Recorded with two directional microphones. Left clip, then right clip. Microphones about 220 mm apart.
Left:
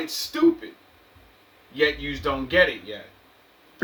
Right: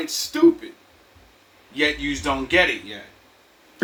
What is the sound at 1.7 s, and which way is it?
Speech, 35° left (ahead or behind).